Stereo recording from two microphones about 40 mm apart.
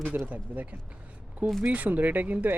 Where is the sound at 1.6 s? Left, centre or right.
Right.